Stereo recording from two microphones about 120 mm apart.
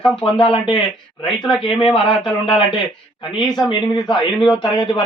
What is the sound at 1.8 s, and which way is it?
A man's voice, 45° left (ahead or behind).